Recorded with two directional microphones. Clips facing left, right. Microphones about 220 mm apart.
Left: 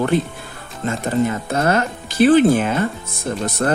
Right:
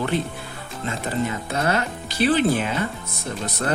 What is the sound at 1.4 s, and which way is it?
Speech, 50° left (ahead or behind).